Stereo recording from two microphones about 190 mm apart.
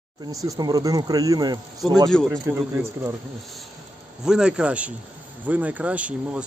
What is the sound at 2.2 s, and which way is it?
Speech, 15° right (ahead or behind).